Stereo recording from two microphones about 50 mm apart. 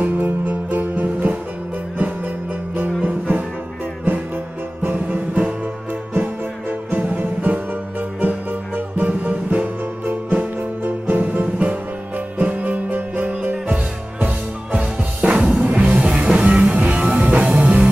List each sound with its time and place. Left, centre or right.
0.0 s music: right
3.0 s music: right
4.9 s music: right
6.9 s music: right